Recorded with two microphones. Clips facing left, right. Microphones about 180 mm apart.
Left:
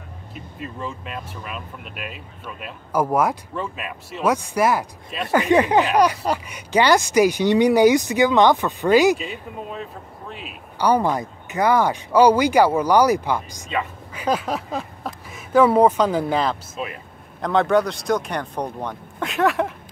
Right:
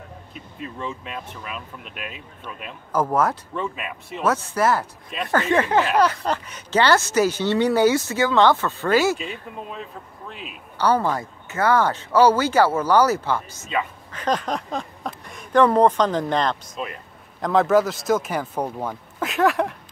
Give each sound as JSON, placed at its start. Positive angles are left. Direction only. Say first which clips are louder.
{"t": 0.3, "sound": "speech", "louder": "left 2 dB", "side_deg": 0}
{"t": 3.5, "sound": "speech", "louder": "even", "side_deg": 0}
{"t": 4.2, "sound": "speech", "louder": "left 2 dB", "side_deg": 15}
{"t": 9.2, "sound": "speech", "louder": "left 1 dB", "side_deg": 0}
{"t": 10.8, "sound": "speech", "louder": "left 2 dB", "side_deg": 15}
{"t": 13.7, "sound": "speech", "louder": "right 1 dB", "side_deg": 5}